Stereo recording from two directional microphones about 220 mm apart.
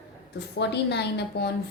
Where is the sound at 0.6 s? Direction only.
50° left (ahead or behind).